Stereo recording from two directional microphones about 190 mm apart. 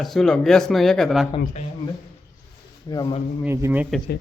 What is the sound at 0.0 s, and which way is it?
Speech, centre (ahead or behind).